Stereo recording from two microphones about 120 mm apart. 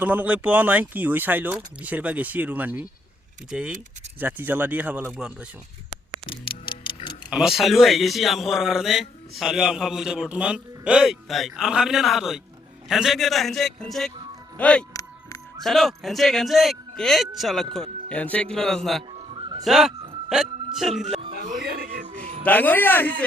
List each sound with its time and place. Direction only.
0.0 s speech: 10° right (ahead or behind)
7.3 s a man's voice: 5° right (ahead or behind)
17.7 s speech: 10° left (ahead or behind)
19.1 s music: 50° right (ahead or behind)
19.6 s speech: centre (ahead or behind)
22.1 s cat: 90° right
22.4 s a man's voice: 15° left (ahead or behind)